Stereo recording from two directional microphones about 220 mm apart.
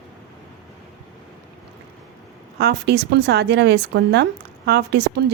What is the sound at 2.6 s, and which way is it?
A woman's voice, 50° right (ahead or behind).